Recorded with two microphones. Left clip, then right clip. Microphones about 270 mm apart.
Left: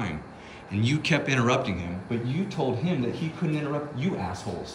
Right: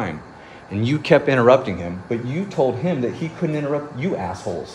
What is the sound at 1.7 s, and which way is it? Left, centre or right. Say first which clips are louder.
Speech: right 7 dB; centre.